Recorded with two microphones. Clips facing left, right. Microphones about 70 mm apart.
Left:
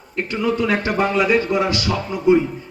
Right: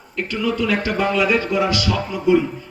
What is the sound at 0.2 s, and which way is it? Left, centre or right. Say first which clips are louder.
A man's voice: left 1 dB; left.